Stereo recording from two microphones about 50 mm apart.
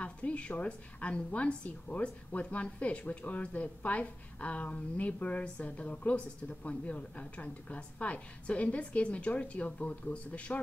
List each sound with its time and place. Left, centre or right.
0.0 s a woman's voice: left